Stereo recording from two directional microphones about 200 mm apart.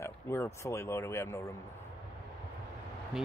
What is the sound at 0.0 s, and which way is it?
Speech, 15° left (ahead or behind).